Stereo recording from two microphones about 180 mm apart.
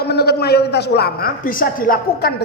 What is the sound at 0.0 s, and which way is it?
A woman's voice, 65° left (ahead or behind).